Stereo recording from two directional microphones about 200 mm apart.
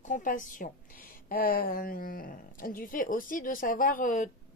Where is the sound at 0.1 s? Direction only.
40° left (ahead or behind).